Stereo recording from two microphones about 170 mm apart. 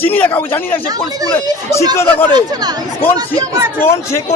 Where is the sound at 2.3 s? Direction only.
25° right (ahead or behind).